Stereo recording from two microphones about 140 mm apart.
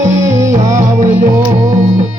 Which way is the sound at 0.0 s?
60° right (ahead or behind).